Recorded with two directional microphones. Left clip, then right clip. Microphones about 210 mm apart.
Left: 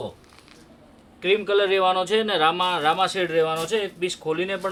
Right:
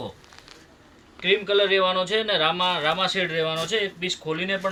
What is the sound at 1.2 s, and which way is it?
Speech, 35° left (ahead or behind).